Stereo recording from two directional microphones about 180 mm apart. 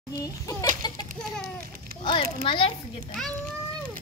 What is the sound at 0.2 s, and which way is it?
Speech, 20° left (ahead or behind).